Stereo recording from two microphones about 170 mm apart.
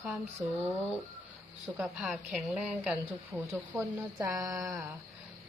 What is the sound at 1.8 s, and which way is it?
A woman's voice, 5° right (ahead or behind).